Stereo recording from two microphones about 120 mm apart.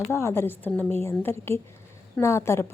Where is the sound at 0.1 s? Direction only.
20° left (ahead or behind).